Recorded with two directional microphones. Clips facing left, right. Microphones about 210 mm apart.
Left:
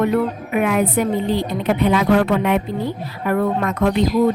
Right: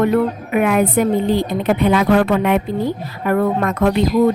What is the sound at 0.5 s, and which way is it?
A woman's voice, 55° right (ahead or behind).